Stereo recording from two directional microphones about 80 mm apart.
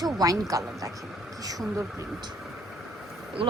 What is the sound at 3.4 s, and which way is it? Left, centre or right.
Speech, right.